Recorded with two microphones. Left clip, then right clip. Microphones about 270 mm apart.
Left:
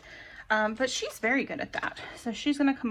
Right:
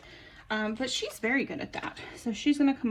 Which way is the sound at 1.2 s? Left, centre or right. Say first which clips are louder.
Left 3 dB; centre.